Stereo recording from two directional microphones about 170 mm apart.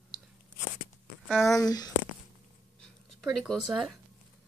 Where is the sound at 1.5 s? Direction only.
25° left (ahead or behind).